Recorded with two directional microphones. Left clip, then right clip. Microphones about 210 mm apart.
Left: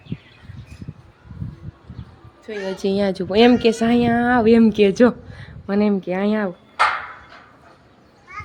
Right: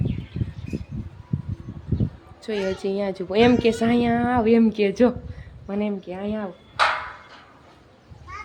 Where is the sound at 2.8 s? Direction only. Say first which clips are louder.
Left 5 dB; 20° left (ahead or behind).